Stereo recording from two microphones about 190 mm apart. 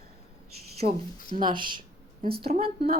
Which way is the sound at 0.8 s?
45° right (ahead or behind).